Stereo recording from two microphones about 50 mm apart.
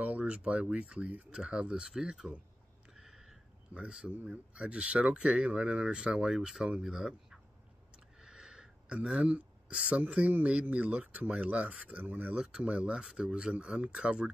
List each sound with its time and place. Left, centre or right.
0.0 s speech: right; by 2.3 s centre
3.0 s a sound: centre
3.7 s speech: right
4.3 s speech: right
8.2 s a sound: centre
9.2 s speech: right